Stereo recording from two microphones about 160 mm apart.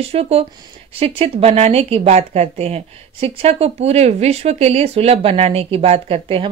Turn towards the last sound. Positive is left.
turn(degrees=-35)  # may be behind; listen again after turning